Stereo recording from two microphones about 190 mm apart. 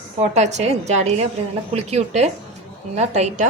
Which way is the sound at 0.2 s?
35° right (ahead or behind).